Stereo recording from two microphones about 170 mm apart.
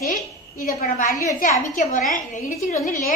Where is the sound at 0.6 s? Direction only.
55° left (ahead or behind).